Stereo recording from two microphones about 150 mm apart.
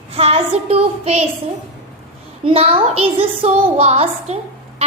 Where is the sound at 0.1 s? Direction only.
45° right (ahead or behind).